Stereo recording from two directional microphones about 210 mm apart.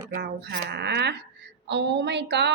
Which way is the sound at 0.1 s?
50° right (ahead or behind).